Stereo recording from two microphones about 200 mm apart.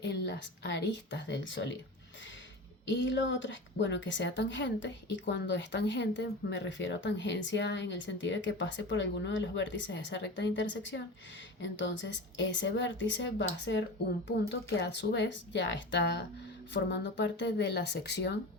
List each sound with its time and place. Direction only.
0.0 s a woman's voice: 55° left (ahead or behind)
2.8 s a woman's voice: 65° left (ahead or behind)